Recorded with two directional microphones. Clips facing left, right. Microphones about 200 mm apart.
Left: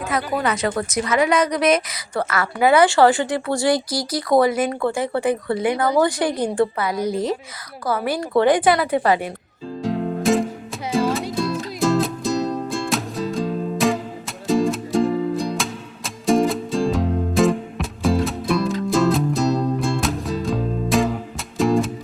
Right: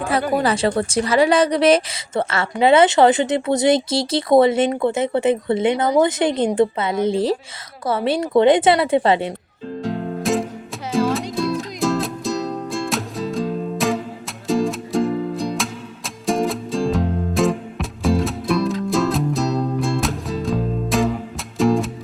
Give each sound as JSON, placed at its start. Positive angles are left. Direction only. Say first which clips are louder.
{"t": 0.0, "sound": "speech", "louder": "right 3 dB", "side_deg": -30}
{"t": 9.8, "sound": "music", "louder": "left 3 dB", "side_deg": 0}